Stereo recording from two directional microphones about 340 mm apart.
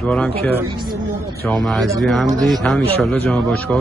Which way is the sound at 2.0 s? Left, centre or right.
Centre.